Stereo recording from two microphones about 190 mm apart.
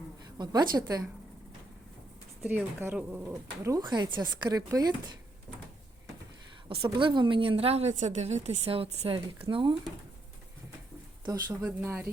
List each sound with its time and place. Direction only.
0.3 s a woman's voice: 20° right (ahead or behind)
2.4 s a woman's voice: 10° right (ahead or behind)
6.7 s a woman's voice: 25° right (ahead or behind)
11.6 s speech: 10° right (ahead or behind)